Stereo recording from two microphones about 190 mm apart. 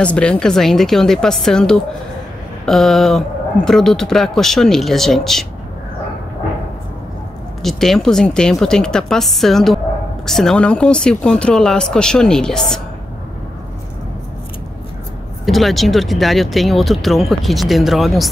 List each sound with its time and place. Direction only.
0.0 s speech: 5° left (ahead or behind)
7.6 s speech: centre (ahead or behind)
15.4 s speech: centre (ahead or behind)